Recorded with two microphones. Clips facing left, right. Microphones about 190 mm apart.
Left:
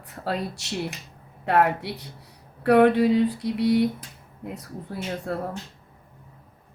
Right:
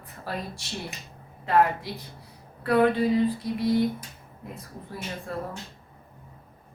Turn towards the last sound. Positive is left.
turn(degrees=70)  # may be behind; listen again after turning